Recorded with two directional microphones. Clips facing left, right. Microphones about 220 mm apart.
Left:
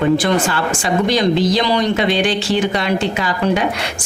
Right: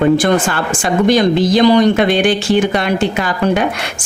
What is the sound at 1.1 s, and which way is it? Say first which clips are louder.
Speech: right 4 dB; 50° right (ahead or behind).